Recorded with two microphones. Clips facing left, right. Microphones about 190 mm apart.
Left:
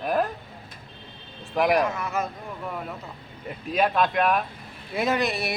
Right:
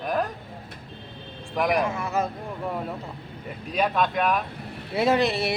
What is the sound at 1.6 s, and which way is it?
Speech, centre (ahead or behind).